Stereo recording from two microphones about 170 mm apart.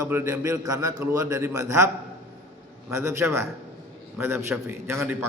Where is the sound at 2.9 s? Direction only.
15° right (ahead or behind).